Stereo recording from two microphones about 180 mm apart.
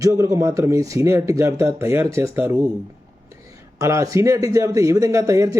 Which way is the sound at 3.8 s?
15° right (ahead or behind).